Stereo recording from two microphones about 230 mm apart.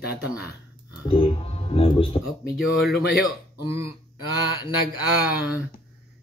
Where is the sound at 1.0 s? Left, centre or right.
Left.